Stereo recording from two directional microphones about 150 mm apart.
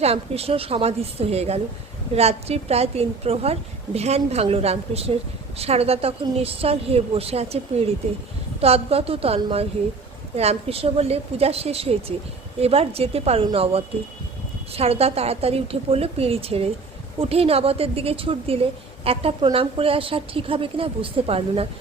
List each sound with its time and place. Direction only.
0.0 s a woman's voice: 40° right (ahead or behind)